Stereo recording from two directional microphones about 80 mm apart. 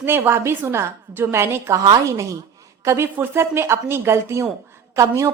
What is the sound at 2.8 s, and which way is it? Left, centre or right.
A woman's voice, right.